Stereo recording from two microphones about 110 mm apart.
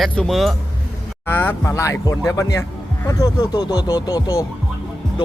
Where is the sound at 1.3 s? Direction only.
20° left (ahead or behind).